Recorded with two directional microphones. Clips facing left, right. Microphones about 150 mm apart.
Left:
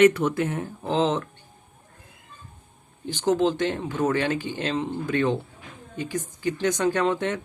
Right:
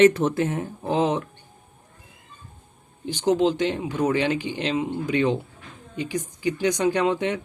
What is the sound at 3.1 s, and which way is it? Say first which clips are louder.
Speech: right 1 dB; 15° right (ahead or behind).